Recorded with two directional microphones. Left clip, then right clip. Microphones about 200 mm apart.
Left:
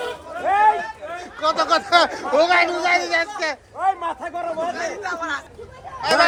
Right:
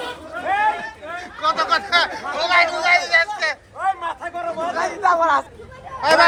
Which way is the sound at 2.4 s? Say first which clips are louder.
Even; 45° left (ahead or behind).